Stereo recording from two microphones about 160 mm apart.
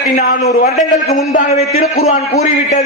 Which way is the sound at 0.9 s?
50° left (ahead or behind).